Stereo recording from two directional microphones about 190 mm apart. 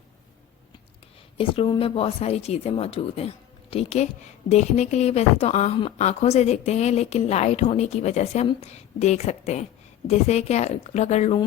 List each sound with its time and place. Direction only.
1.4 s a woman's voice: 25° left (ahead or behind)